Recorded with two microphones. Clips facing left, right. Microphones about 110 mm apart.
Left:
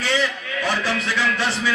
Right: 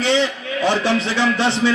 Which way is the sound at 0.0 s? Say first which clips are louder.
Right 5 dB; 25° right (ahead or behind).